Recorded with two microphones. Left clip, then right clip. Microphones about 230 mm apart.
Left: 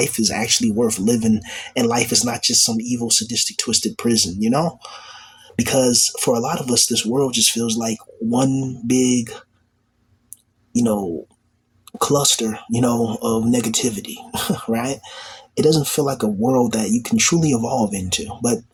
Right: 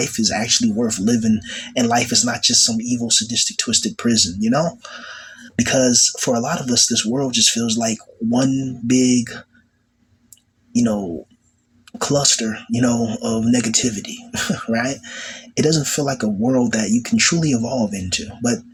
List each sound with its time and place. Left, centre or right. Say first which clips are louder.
0.0 s speech: even; centre
10.8 s speech: left 1 dB; centre